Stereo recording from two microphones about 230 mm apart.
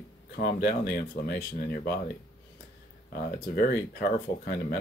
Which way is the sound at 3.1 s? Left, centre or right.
Left.